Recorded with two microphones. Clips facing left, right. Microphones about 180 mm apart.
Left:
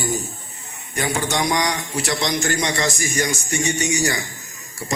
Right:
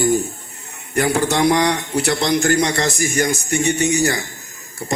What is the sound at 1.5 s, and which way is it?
Speech, 60° right (ahead or behind).